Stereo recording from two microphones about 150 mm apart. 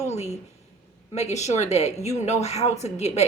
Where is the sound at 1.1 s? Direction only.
50° left (ahead or behind).